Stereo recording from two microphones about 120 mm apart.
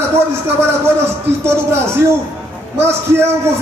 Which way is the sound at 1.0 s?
20° right (ahead or behind).